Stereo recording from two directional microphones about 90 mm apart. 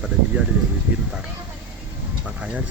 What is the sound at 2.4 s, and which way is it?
Speech, 10° right (ahead or behind).